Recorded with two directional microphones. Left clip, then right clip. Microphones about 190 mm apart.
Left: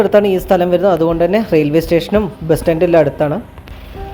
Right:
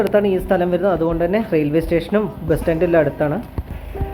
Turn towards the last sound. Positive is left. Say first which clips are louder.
# left 5 dB
turn(degrees=45)  # may be behind; listen again after turning